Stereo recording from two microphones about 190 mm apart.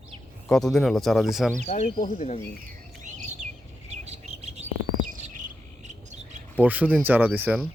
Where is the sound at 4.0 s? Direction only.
35° right (ahead or behind).